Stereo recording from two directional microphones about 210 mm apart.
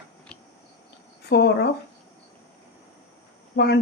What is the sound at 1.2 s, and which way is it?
Speech, 50° left (ahead or behind).